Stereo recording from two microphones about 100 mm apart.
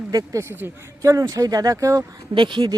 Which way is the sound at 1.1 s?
35° right (ahead or behind).